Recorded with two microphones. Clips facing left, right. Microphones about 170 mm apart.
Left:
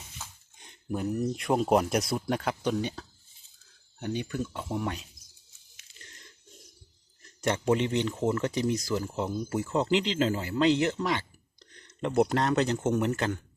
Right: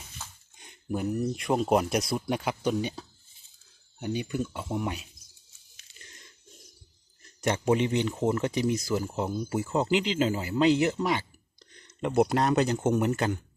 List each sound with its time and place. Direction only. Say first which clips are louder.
0.9 s speech: right 1 dB; 5° right (ahead or behind)
4.0 s speech: right 1 dB; 10° right (ahead or behind)
7.4 s speech: right 1 dB; 15° right (ahead or behind)